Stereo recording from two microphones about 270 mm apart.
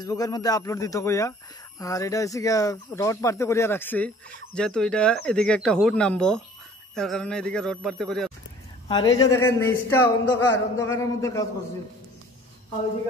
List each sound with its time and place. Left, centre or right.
0.0 s speech: centre
8.8 s speech: centre